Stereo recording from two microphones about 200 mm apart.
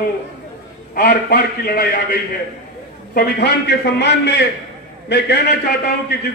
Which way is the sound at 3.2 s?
55° left (ahead or behind).